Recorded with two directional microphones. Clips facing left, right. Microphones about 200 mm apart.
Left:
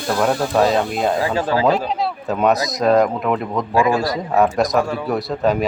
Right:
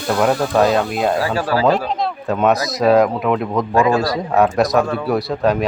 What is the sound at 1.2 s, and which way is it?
Speech, 20° left (ahead or behind).